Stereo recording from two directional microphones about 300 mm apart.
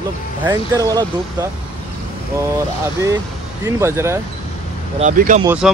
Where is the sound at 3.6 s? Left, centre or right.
Centre.